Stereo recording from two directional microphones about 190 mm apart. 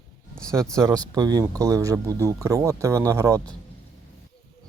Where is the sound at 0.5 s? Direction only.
15° right (ahead or behind).